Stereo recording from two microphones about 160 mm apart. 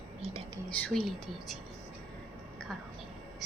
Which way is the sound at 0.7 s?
5° left (ahead or behind).